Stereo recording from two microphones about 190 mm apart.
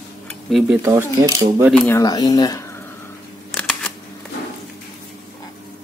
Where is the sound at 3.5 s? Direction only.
5° left (ahead or behind).